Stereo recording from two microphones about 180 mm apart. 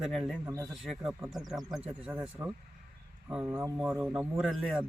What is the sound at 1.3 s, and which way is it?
A man's voice, centre (ahead or behind).